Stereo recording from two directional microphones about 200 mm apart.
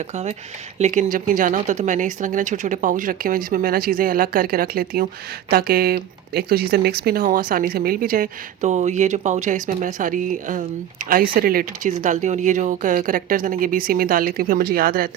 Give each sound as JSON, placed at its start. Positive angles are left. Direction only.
{"t": 0.8, "sound": "speech", "side_deg": -35}